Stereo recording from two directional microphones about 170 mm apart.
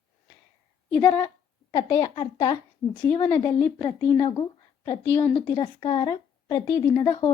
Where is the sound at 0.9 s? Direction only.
10° left (ahead or behind).